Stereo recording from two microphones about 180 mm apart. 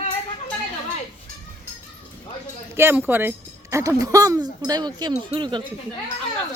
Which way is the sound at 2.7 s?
10° right (ahead or behind).